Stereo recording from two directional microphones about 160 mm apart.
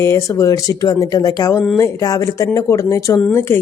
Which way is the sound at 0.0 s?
20° left (ahead or behind).